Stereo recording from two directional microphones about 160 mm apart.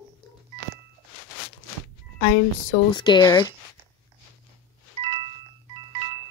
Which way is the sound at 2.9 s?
30° left (ahead or behind).